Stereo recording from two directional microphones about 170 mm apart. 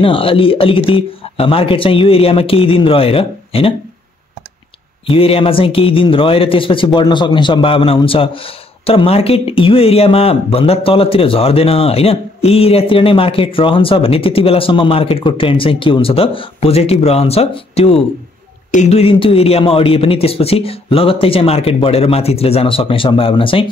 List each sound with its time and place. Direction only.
0.0 s a man's voice: 30° left (ahead or behind)
5.0 s a man's voice: 35° left (ahead or behind)